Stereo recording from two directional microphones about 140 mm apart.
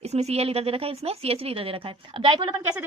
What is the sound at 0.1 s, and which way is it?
A woman's voice, 50° right (ahead or behind).